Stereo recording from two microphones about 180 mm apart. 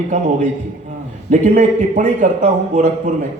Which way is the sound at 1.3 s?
40° right (ahead or behind).